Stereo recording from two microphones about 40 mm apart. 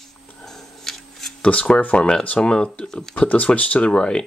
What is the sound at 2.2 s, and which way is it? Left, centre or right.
Speech, left.